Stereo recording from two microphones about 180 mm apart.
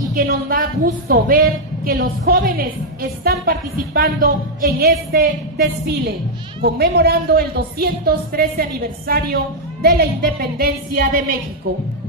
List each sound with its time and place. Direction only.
0.1 s speech: 50° right (ahead or behind)